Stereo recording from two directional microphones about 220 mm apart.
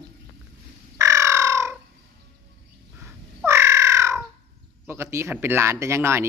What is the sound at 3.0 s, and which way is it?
Crow, 10° right (ahead or behind).